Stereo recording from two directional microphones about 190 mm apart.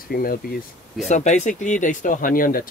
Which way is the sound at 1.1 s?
40° left (ahead or behind).